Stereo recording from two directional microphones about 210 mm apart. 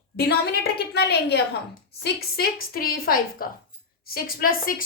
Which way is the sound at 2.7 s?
45° left (ahead or behind).